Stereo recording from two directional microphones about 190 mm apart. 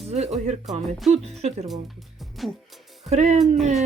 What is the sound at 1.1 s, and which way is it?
Speech, 35° right (ahead or behind).